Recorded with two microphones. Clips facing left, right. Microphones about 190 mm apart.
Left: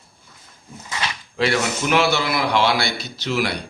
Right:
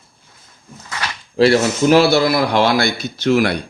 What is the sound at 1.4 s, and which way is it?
A man's voice, 35° right (ahead or behind).